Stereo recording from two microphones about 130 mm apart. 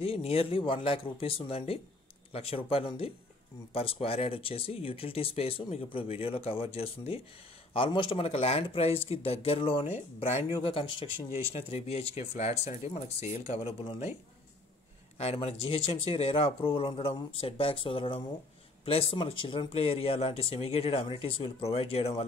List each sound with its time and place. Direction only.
0.0 s speech: 50° left (ahead or behind)
15.1 s speech: 50° left (ahead or behind)